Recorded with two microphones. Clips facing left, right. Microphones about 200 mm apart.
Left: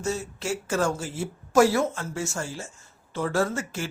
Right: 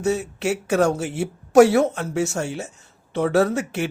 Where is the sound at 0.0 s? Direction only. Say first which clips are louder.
Right 7 dB; 65° right (ahead or behind).